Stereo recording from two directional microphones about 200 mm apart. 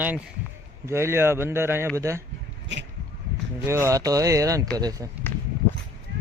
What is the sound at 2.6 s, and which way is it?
Speech, 60° right (ahead or behind).